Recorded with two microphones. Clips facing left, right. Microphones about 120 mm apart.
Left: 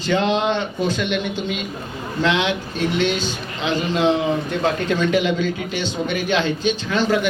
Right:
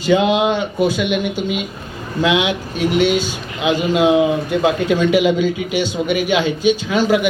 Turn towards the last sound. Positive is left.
turn(degrees=-10)  # may be behind; listen again after turning